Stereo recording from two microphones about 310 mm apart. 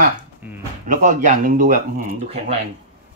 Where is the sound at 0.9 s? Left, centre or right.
Right.